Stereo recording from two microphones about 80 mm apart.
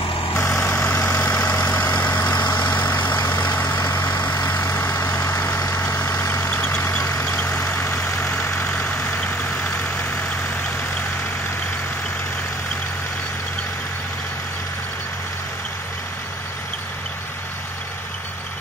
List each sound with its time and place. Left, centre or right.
0.5 s vehicle: centre
0.9 s vehicle: left
1.4 s vehicle: left
1.7 s vehicle: left
5.6 s vehicle: left
5.9 s vehicle: left
7.0 s vehicle: left